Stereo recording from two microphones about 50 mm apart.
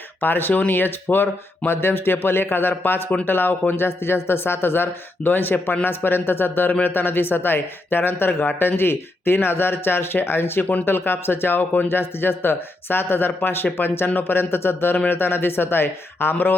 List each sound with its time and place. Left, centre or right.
0.2 s a man's voice: left
16.3 s speech: left